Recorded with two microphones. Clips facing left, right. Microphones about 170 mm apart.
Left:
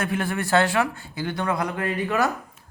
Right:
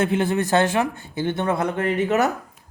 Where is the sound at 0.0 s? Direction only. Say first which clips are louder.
Right 5 dB; 25° right (ahead or behind).